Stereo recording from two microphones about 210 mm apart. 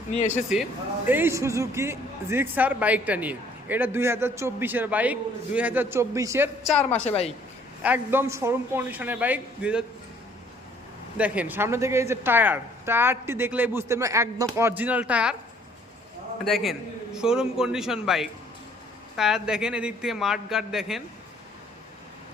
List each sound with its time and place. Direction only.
0.2 s speech: 35° left (ahead or behind)
0.5 s a man's voice: 5° right (ahead or behind)
7.8 s a man's voice: 5° right (ahead or behind)
11.2 s a man's voice: 5° right (ahead or behind)
16.4 s a man's voice: centre (ahead or behind)